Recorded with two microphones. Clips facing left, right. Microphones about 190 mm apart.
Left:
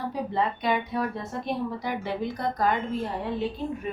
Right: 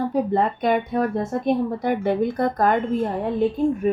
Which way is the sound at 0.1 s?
50° right (ahead or behind).